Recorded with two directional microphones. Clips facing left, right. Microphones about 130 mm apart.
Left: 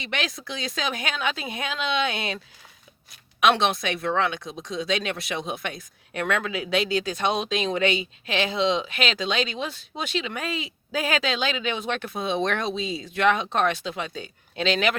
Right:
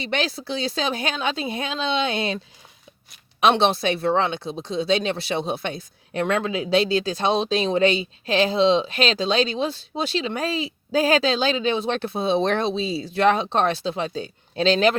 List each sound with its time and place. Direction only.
0.0 s speech: 30° right (ahead or behind)
3.4 s speech: 30° right (ahead or behind)